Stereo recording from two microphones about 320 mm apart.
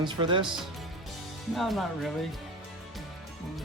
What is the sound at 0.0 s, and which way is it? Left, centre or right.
Speech, centre.